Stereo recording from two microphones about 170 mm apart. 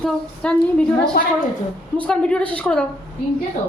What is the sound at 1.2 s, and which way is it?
Speech, 65° left (ahead or behind).